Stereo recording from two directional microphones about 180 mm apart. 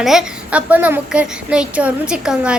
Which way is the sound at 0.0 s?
Centre (ahead or behind).